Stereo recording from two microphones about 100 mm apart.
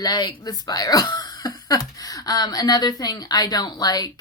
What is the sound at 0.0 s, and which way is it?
Speech, 40° left (ahead or behind).